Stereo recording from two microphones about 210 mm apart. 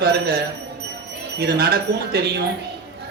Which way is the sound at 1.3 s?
50° right (ahead or behind).